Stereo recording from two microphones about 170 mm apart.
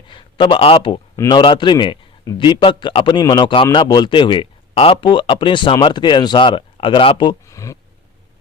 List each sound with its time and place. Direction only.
0.1 s a man's voice: 30° left (ahead or behind)
7.4 s speech: 20° left (ahead or behind)